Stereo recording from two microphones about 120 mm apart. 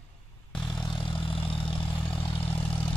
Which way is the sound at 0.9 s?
45° left (ahead or behind).